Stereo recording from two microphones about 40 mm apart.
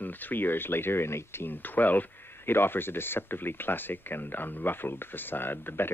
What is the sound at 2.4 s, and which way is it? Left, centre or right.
Speech, left.